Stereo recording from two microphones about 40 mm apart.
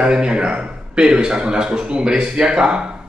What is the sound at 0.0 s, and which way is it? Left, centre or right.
A man's voice, right.